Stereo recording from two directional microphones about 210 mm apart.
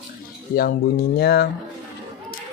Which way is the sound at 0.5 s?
45° left (ahead or behind).